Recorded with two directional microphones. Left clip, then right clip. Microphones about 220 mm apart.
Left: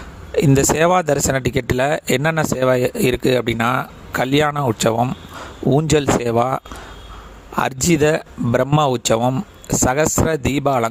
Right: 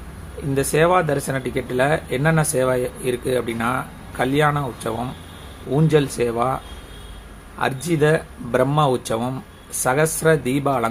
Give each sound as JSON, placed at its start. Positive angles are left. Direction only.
{"t": 0.5, "sound": "speech", "side_deg": 50}